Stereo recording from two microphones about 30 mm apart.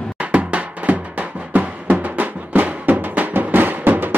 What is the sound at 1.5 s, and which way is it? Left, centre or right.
Music, right.